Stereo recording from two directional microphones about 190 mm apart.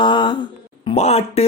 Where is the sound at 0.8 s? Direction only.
35° left (ahead or behind).